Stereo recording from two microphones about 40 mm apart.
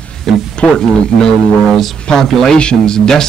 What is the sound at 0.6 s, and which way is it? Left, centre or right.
Speech, centre.